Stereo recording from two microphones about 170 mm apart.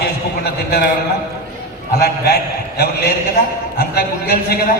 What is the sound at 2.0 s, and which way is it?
A man's voice, 70° left (ahead or behind).